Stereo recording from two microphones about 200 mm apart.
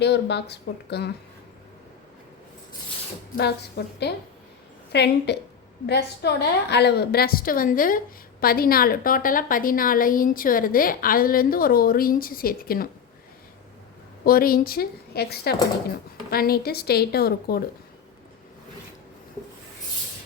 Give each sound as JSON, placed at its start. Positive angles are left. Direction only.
{"t": 0.0, "sound": "speech", "side_deg": 55}
{"t": 3.3, "sound": "a woman's voice", "side_deg": 55}
{"t": 14.3, "sound": "a woman's voice", "side_deg": 45}